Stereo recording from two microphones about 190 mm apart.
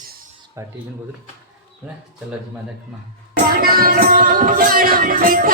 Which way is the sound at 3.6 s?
50° right (ahead or behind).